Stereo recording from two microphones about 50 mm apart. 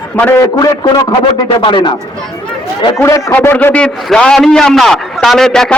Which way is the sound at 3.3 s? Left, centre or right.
Left.